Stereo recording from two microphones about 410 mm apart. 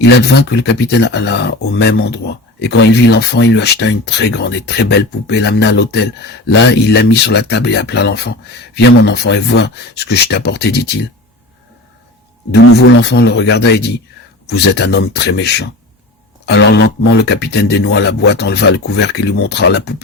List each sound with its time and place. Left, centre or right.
0.0 s speech: left
12.5 s speech: left